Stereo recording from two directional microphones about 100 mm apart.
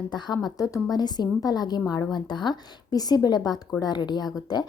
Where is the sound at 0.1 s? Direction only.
45° left (ahead or behind).